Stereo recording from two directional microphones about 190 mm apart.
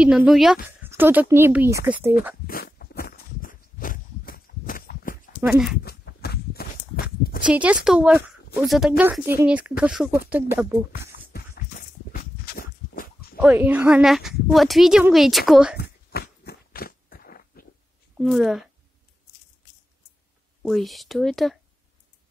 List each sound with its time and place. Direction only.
0.0 s speech: 5° right (ahead or behind)
2.4 s walk: 50° left (ahead or behind)
5.5 s speech: centre (ahead or behind)
5.9 s walk: 55° left (ahead or behind)
7.4 s speech: 5° right (ahead or behind)
12.1 s a sound: 50° left (ahead or behind)
13.4 s speech: 10° right (ahead or behind)
15.8 s biting: 55° left (ahead or behind)
18.1 s a woman's voice: 5° right (ahead or behind)
20.6 s speech: centre (ahead or behind)